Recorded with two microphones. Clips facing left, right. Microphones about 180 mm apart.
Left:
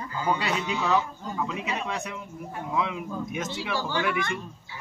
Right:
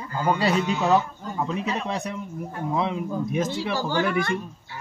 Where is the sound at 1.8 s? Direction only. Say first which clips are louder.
Right 4 dB; 35° right (ahead or behind).